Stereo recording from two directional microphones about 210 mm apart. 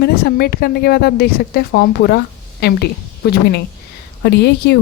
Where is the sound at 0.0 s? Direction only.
45° left (ahead or behind).